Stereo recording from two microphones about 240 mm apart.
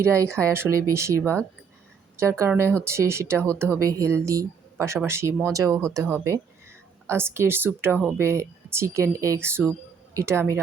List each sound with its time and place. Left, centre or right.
0.0 s speech: centre